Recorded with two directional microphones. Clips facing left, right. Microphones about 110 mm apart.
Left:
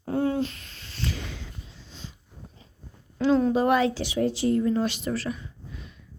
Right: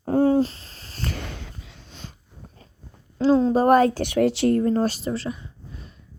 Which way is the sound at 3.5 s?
45° right (ahead or behind).